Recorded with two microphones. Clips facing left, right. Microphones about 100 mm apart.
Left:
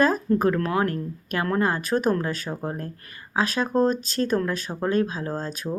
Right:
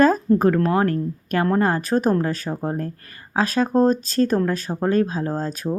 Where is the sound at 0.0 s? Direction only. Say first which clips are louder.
Right 4 dB; 40° right (ahead or behind).